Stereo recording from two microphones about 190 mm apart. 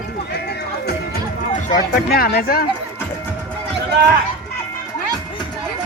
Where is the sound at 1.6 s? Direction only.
55° left (ahead or behind).